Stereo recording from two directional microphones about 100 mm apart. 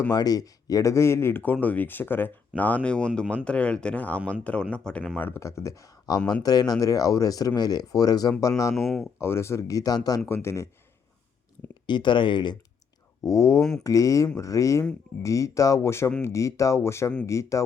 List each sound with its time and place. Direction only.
0.1 s speech: 40° left (ahead or behind)
8.7 s speech: centre (ahead or behind)
9.1 s speech: 25° left (ahead or behind)
10.2 s speech: 25° left (ahead or behind)
11.9 s speech: 50° left (ahead or behind)
13.2 s speech: 30° left (ahead or behind)